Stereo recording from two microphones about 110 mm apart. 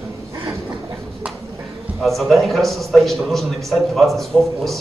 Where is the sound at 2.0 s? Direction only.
Centre (ahead or behind).